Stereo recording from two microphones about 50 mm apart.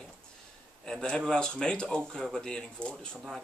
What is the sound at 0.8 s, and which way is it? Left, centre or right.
Speech, centre.